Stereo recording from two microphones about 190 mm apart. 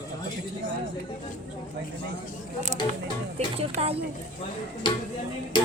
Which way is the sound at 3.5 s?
30° right (ahead or behind).